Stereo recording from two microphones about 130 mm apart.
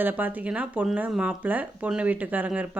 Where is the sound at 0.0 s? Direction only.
15° right (ahead or behind).